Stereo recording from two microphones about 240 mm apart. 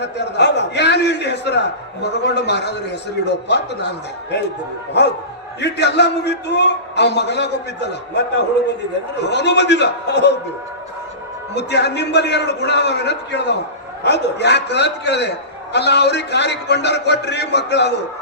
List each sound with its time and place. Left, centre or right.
0.0 s a man's voice: left
5.5 s a man's voice: left
11.5 s a man's voice: left